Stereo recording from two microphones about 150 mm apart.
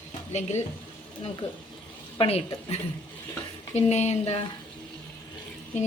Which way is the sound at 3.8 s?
45° left (ahead or behind).